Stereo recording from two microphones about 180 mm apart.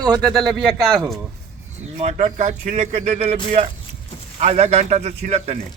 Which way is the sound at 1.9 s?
40° right (ahead or behind).